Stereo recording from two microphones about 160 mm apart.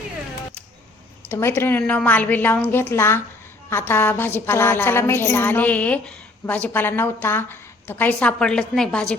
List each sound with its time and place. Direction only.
1.3 s a woman's voice: 15° left (ahead or behind)